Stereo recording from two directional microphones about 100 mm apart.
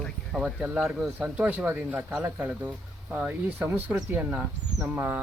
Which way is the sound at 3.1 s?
10° right (ahead or behind).